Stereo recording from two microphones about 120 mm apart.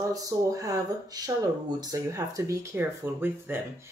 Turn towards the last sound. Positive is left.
turn(degrees=-20)  # may be behind; listen again after turning